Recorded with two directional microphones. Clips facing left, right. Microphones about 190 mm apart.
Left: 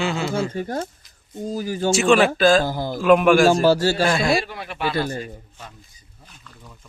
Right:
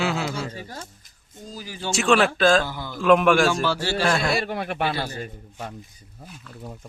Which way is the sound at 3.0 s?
5° left (ahead or behind).